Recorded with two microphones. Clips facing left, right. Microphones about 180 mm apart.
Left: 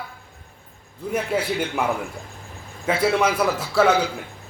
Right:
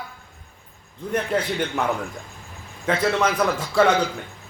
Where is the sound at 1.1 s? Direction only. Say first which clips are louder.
Even; 10° left (ahead or behind).